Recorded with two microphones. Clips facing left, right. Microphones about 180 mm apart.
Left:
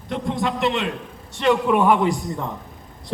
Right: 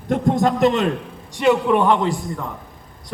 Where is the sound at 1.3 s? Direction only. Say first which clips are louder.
Right 2 dB; 10° right (ahead or behind).